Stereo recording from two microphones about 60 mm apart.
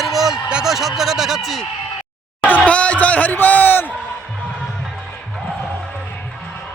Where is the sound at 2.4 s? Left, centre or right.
Left.